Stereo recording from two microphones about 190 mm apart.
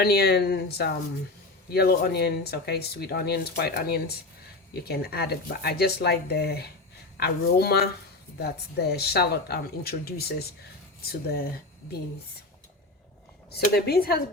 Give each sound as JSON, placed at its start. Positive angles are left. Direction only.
{"t": 0.0, "sound": "speech", "side_deg": 55}
{"t": 13.5, "sound": "speech", "side_deg": 55}